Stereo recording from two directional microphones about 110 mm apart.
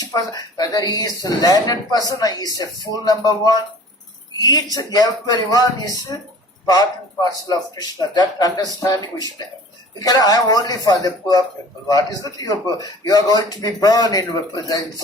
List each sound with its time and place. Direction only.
0.0 s a man's voice: 35° left (ahead or behind)
7.3 s a man's voice: 35° left (ahead or behind)